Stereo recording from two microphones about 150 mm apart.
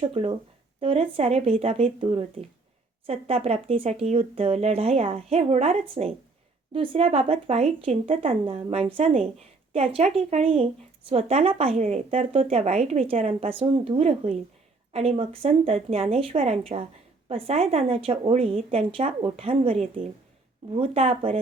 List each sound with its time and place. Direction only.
0.0 s speech: 40° right (ahead or behind)